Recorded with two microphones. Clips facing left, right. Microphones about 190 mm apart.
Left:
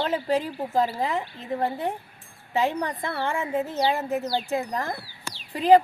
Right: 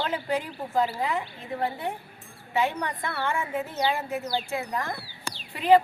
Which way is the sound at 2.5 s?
35° left (ahead or behind).